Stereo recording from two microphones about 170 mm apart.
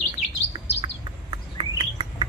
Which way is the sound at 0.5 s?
20° right (ahead or behind).